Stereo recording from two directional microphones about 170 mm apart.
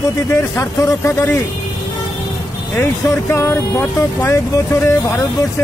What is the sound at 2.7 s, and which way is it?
Speech, 15° left (ahead or behind).